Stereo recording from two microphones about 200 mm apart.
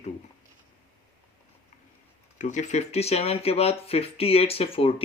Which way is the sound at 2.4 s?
35° left (ahead or behind).